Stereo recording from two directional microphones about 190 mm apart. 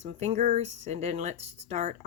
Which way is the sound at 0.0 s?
35° right (ahead or behind).